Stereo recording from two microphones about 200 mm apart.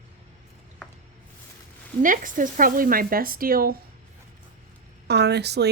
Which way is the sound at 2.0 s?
40° right (ahead or behind).